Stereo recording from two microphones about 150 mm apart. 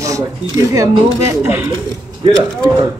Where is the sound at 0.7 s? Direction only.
15° right (ahead or behind).